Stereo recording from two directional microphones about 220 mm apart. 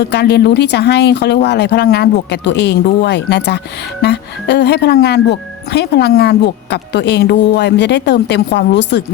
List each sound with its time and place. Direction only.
0.0 s speech: 50° left (ahead or behind)